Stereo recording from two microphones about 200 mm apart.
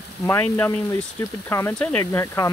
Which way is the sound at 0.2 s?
10° left (ahead or behind).